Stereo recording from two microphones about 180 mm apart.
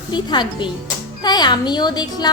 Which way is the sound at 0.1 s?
25° left (ahead or behind).